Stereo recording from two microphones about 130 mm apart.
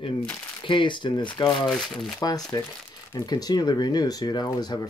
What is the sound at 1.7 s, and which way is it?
Speech, 5° left (ahead or behind).